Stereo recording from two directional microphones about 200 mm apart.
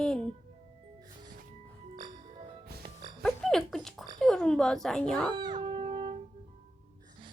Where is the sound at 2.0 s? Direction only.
20° right (ahead or behind).